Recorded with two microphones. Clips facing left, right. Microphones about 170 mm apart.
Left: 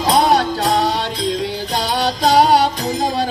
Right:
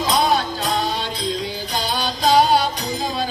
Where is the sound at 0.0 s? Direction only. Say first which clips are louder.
Left 5 dB; 70° left (ahead or behind).